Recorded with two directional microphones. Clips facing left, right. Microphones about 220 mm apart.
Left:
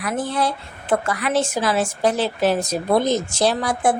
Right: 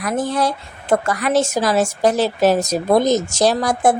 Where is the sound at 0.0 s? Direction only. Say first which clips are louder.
Right 3 dB; 40° right (ahead or behind).